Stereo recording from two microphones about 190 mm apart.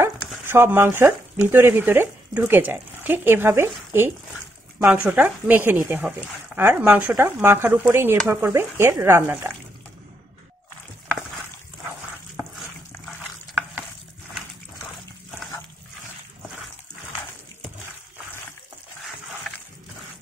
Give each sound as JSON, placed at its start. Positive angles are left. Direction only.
{"t": 0.0, "sound": "speech", "side_deg": -10}
{"t": 4.8, "sound": "speech", "side_deg": -5}